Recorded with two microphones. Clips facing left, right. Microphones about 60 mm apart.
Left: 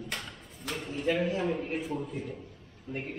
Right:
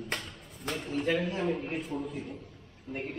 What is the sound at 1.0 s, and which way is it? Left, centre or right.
A man's voice, centre.